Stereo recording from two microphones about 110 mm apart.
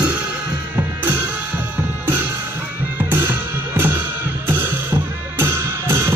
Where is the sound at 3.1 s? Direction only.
20° right (ahead or behind).